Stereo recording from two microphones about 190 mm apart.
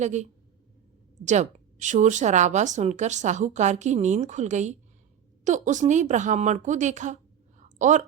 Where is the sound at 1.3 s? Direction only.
40° right (ahead or behind).